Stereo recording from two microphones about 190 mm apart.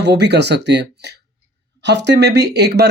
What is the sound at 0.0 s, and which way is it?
Speech, 65° right (ahead or behind).